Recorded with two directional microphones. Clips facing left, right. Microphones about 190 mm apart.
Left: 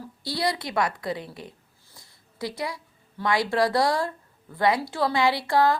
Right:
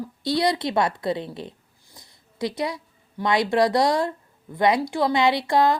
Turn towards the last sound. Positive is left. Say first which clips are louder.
# right 2 dB
turn(degrees=-20)  # may be behind; listen again after turning